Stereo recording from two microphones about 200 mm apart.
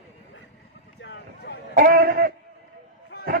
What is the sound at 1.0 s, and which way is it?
Vehicle, 55° left (ahead or behind).